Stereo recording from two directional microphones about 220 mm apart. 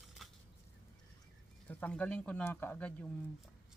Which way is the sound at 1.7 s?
5° left (ahead or behind).